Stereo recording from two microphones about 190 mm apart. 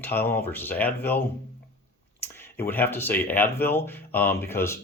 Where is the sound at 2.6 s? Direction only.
10° left (ahead or behind).